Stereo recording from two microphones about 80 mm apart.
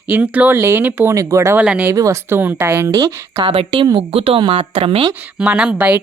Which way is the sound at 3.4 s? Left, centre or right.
Right.